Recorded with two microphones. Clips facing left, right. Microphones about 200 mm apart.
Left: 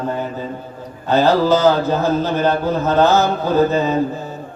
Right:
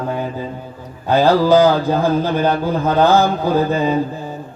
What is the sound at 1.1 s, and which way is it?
Speech, 10° right (ahead or behind).